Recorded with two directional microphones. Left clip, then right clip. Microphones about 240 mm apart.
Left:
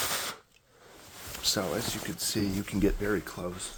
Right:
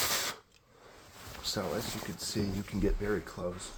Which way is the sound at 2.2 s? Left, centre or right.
Left.